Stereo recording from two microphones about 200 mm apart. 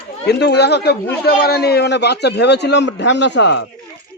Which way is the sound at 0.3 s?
55° left (ahead or behind).